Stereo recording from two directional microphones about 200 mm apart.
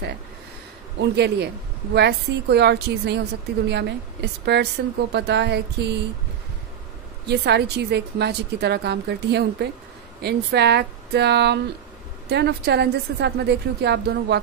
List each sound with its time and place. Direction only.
0.9 s a woman's voice: 55° right (ahead or behind)
7.2 s a woman's voice: 55° right (ahead or behind)